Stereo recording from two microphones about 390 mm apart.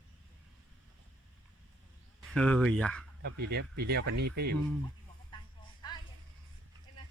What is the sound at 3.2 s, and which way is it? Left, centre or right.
Speech, right.